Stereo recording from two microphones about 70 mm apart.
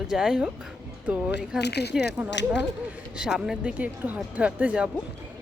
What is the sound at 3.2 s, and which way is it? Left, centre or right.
Speech, centre.